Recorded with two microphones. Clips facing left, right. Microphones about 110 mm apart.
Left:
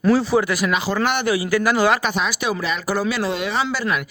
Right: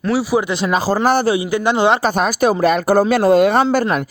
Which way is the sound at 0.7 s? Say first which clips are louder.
Right 10 dB; 40° right (ahead or behind).